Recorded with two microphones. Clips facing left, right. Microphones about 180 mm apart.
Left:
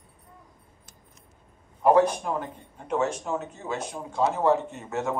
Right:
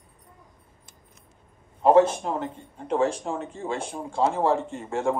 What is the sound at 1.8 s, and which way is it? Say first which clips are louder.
A man's voice: right 2 dB; 25° right (ahead or behind).